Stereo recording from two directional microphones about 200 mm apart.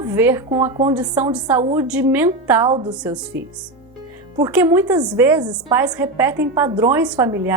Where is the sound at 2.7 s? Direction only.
25° right (ahead or behind).